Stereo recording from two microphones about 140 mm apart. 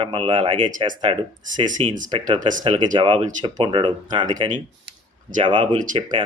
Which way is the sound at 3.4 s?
35° right (ahead or behind).